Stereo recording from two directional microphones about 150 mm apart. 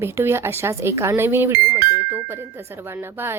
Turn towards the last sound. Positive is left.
turn(degrees=-15)  # may be behind; listen again after turning